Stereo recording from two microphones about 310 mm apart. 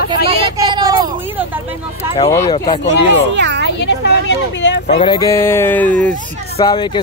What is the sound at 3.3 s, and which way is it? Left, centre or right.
Speech, right.